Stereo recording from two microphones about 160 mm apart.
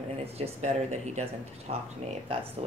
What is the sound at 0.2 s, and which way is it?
Speech, 40° right (ahead or behind).